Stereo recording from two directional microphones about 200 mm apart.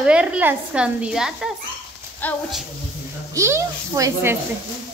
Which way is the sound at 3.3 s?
15° right (ahead or behind).